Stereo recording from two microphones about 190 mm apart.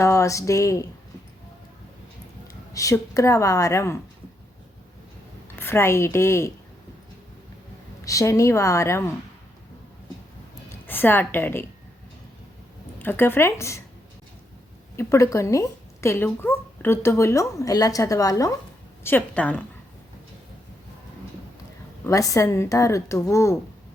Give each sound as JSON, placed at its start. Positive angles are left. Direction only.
{"t": 0.0, "sound": "a woman's voice", "side_deg": 15}
{"t": 2.7, "sound": "a woman's voice", "side_deg": 15}
{"t": 5.5, "sound": "a woman's voice", "side_deg": 15}
{"t": 8.0, "sound": "a woman's voice", "side_deg": 15}
{"t": 10.7, "sound": "a woman's voice", "side_deg": 10}
{"t": 13.0, "sound": "a woman's voice", "side_deg": 10}
{"t": 14.9, "sound": "a woman's voice", "side_deg": 15}
{"t": 22.0, "sound": "a woman's voice", "side_deg": 15}